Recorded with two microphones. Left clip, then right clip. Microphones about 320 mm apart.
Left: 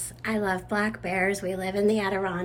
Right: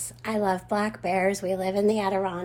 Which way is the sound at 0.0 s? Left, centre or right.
Centre.